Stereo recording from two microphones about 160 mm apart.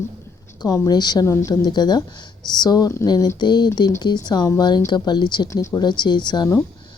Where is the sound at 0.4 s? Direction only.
20° left (ahead or behind).